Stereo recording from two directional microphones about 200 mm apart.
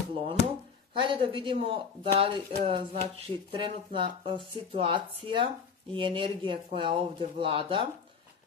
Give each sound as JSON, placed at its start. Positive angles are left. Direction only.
{"t": 0.1, "sound": "speech", "side_deg": -30}